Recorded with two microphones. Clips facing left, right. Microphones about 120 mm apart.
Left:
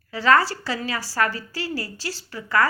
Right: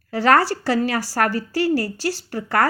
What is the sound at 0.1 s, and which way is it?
Speech, 60° right (ahead or behind).